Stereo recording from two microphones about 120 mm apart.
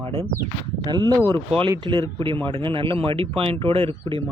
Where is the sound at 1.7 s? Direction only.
40° right (ahead or behind).